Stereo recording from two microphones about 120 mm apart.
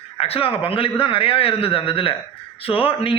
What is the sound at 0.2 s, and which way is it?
A man's voice, 50° left (ahead or behind).